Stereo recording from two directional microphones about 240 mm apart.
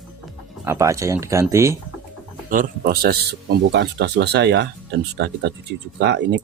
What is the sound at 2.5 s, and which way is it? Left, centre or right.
Speech, right.